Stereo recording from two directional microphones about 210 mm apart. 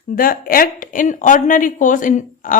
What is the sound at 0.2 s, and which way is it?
A woman's voice, 45° left (ahead or behind).